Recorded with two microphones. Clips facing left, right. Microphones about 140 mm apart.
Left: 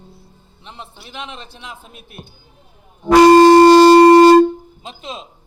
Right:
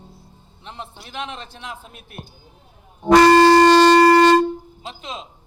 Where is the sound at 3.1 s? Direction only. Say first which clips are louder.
Left 5 dB; 15° left (ahead or behind).